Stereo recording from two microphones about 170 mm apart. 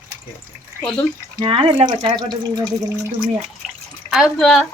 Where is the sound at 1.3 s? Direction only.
30° right (ahead or behind).